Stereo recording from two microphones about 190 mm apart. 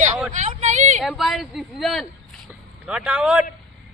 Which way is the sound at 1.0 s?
Centre (ahead or behind).